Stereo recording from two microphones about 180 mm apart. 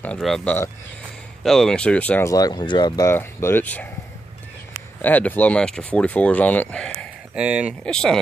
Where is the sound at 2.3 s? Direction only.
20° left (ahead or behind).